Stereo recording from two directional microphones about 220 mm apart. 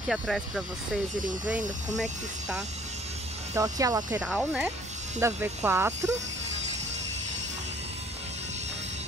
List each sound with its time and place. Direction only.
0.1 s speech: centre (ahead or behind)
3.5 s speech: 15° right (ahead or behind)
4.2 s speech: 5° right (ahead or behind)